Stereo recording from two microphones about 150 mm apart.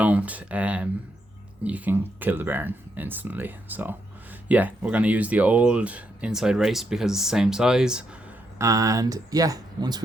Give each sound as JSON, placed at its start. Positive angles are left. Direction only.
{"t": 0.0, "sound": "speech", "side_deg": -10}
{"t": 8.5, "sound": "speech", "side_deg": -20}